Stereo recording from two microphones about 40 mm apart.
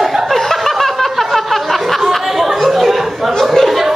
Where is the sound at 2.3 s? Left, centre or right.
Centre.